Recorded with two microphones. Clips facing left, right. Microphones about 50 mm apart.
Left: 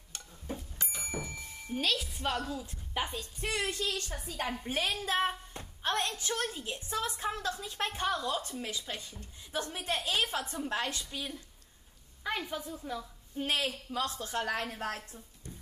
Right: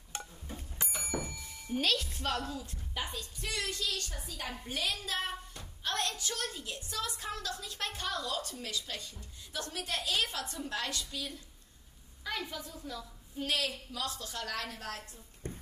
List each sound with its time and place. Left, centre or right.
1.0 s thunk: left
1.8 s a woman's voice: centre
2.6 s a woman's voice: left
15.4 s a sound: right